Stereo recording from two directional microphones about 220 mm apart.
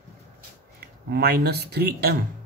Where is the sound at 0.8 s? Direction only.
45° right (ahead or behind).